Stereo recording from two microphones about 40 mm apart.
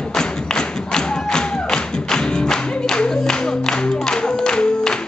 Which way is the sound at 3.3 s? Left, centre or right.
Centre.